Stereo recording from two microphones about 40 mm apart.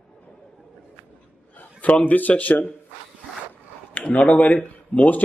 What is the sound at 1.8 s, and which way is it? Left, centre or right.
Speech, left.